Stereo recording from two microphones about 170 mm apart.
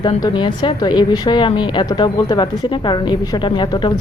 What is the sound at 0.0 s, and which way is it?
A woman's voice, 25° left (ahead or behind).